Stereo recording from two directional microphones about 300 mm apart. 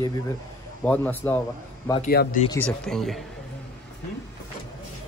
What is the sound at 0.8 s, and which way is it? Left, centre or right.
Speech, centre.